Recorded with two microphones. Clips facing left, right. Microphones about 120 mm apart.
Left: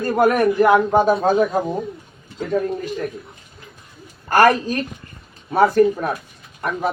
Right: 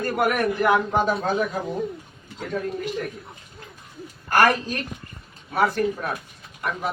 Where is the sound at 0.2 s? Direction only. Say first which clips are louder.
Left 7 dB; 30° left (ahead or behind).